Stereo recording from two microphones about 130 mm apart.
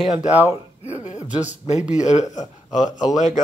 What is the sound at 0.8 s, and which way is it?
Speech, 60° left (ahead or behind).